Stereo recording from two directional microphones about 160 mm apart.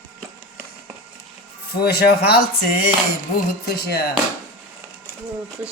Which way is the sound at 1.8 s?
85° left.